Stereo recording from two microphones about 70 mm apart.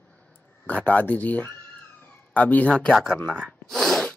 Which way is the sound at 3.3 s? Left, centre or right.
Centre.